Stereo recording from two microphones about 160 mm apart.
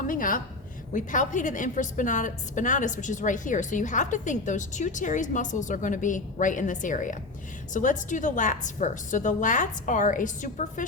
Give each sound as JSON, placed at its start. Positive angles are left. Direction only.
{"t": 0.0, "sound": "a woman's voice", "side_deg": 60}